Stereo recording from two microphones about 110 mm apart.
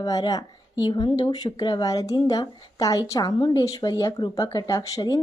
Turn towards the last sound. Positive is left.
turn(degrees=30)  # may be behind; listen again after turning